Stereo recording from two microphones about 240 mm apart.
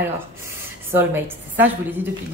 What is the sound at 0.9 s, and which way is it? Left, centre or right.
A woman's voice, centre.